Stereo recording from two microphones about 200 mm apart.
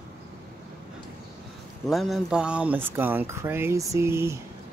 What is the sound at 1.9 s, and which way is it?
Speech, centre (ahead or behind).